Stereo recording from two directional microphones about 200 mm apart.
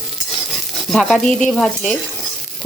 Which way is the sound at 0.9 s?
Centre (ahead or behind).